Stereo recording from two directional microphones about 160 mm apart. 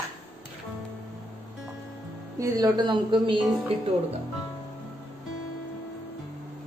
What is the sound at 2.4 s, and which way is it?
Speech, 25° right (ahead or behind).